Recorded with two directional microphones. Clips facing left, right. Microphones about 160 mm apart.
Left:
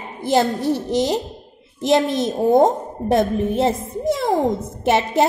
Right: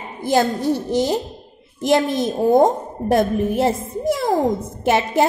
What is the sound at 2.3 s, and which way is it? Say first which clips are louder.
Speech: even; centre (ahead or behind).